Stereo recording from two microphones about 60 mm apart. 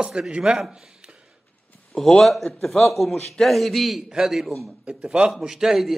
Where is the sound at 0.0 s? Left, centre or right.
Centre.